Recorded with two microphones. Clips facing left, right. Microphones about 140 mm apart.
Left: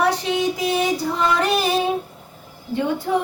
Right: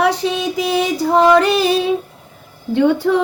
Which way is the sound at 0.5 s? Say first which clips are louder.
Right 3 dB; 90° right.